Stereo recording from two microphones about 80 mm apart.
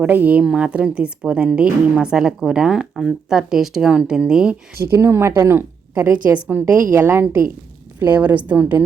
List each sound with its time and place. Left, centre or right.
0.0 s a woman's voice: right
4.8 s a woman's voice: right